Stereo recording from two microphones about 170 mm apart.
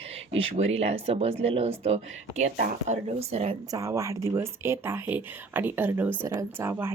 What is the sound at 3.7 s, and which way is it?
Speech, 20° right (ahead or behind).